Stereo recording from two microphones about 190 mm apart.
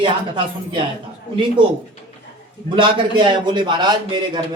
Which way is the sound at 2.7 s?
25° right (ahead or behind).